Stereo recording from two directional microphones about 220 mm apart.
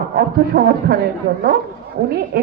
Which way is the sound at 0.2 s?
45° right (ahead or behind).